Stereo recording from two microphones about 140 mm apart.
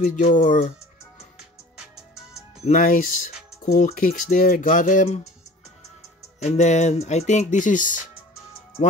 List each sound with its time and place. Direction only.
0.1 s speech: 65° left (ahead or behind)
2.6 s speech: 70° left (ahead or behind); by 5.3 s 50° left (ahead or behind)
6.4 s speech: 55° left (ahead or behind)